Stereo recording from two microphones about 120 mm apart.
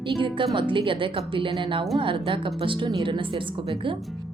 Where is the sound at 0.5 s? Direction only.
45° right (ahead or behind).